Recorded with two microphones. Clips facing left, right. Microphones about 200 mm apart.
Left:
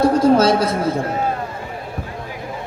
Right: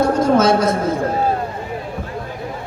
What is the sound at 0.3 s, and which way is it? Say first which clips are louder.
Speech: even; 30° left (ahead or behind).